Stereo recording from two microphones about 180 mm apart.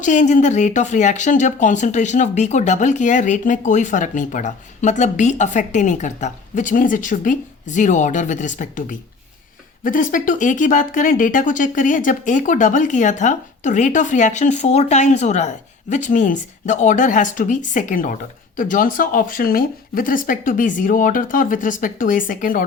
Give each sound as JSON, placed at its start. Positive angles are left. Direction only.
{"t": 0.0, "sound": "speech", "side_deg": 45}